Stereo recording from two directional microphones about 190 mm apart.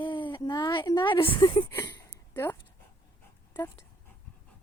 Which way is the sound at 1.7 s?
15° left (ahead or behind).